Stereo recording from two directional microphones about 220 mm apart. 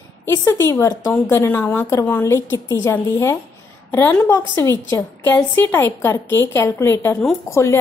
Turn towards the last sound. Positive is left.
turn(degrees=15)  # may be behind; listen again after turning